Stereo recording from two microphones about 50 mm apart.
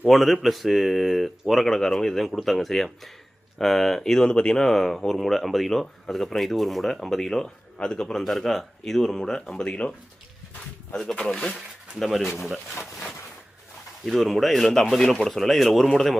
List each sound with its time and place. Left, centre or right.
0.1 s speech: centre
9.6 s speech: left
10.9 s speech: centre
11.3 s speech: centre
14.0 s speech: centre